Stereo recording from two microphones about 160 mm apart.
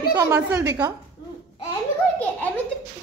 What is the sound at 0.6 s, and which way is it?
Speech, 25° right (ahead or behind).